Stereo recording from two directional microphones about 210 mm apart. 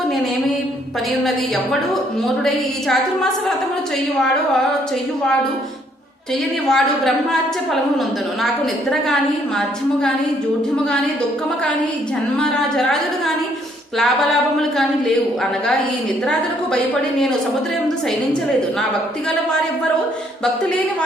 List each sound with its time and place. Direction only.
6.7 s speech: centre (ahead or behind)
12.4 s speech: centre (ahead or behind)